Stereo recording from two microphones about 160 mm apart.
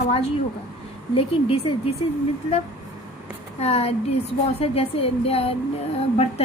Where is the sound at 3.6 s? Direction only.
40° left (ahead or behind).